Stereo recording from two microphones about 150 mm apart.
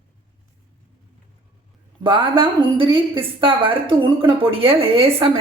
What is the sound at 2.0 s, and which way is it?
A woman's voice, 35° right (ahead or behind).